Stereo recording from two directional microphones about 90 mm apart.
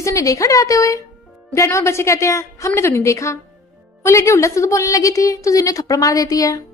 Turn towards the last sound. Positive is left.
turn(degrees=40)  # may be behind; listen again after turning